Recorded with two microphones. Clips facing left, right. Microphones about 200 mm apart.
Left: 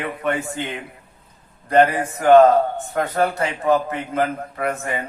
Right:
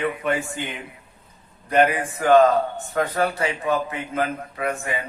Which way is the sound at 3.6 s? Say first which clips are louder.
Left 5 dB; 50° left (ahead or behind).